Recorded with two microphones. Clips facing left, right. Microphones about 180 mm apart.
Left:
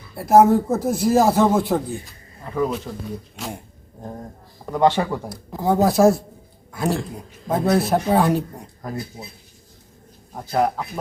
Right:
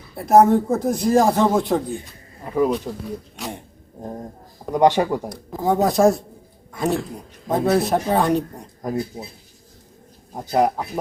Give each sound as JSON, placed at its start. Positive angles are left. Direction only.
{"t": 0.2, "sound": "speech", "side_deg": 0}
{"t": 2.4, "sound": "speech", "side_deg": -15}
{"t": 3.3, "sound": "a sound", "side_deg": 0}
{"t": 4.7, "sound": "speech", "side_deg": -15}
{"t": 5.5, "sound": "speech", "side_deg": 0}
{"t": 8.8, "sound": "speech", "side_deg": -15}
{"t": 10.3, "sound": "speech", "side_deg": -15}